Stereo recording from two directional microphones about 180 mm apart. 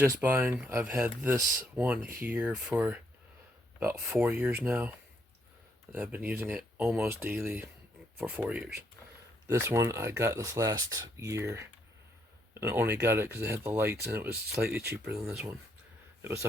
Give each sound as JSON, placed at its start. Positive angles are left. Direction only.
{"t": 0.0, "sound": "a man's voice", "side_deg": -10}